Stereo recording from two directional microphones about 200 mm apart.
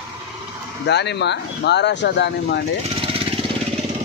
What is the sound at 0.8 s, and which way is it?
Speech, 60° left (ahead or behind).